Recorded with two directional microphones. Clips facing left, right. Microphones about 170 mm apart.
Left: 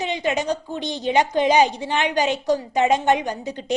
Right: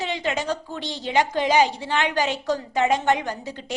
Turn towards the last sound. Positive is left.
turn(degrees=20)  # may be behind; listen again after turning